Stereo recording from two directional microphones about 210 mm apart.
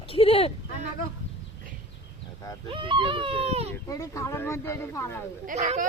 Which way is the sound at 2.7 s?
25° right (ahead or behind).